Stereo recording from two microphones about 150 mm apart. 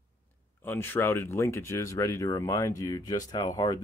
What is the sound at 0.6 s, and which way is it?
Speech, 15° left (ahead or behind).